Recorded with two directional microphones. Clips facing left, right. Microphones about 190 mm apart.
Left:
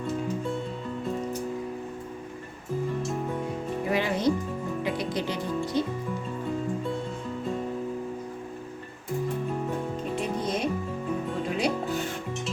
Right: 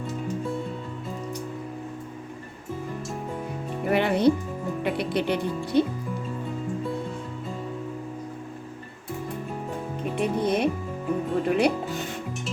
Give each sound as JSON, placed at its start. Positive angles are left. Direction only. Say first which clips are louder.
{"t": 3.8, "sound": "speech", "louder": "right 5 dB", "side_deg": -60}
{"t": 10.2, "sound": "music", "louder": "right 7 dB", "side_deg": -60}